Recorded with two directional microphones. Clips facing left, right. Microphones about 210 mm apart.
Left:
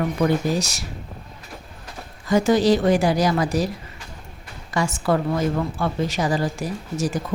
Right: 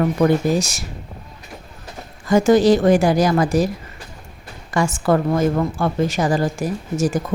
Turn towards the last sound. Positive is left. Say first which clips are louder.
# right 5 dB
turn(degrees=-45)  # may be behind; listen again after turning